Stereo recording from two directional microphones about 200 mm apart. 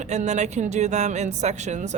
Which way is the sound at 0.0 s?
35° right (ahead or behind).